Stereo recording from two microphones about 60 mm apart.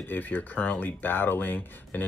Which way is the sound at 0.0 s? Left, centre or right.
Left.